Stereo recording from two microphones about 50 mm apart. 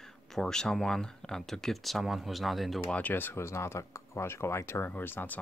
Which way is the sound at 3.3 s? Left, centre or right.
Left.